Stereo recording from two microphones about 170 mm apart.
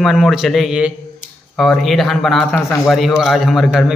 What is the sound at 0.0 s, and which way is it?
Speech, centre (ahead or behind).